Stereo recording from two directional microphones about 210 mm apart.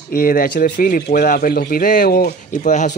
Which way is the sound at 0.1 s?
40° left (ahead or behind).